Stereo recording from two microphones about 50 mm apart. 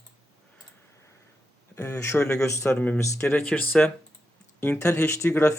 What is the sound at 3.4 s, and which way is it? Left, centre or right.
Speech, left.